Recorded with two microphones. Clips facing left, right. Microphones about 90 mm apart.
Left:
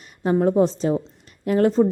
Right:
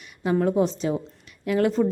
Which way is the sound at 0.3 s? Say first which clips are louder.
Left 4 dB; 35° left (ahead or behind).